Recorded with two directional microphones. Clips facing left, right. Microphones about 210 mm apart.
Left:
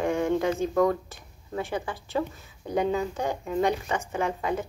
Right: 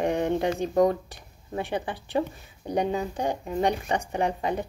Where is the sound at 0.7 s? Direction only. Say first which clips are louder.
Right 2 dB; 35° right (ahead or behind).